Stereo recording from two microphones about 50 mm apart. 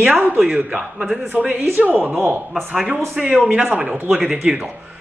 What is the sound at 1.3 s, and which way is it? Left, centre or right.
Speech, right.